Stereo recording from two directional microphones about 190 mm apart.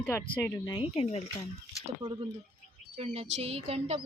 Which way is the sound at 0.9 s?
30° left (ahead or behind).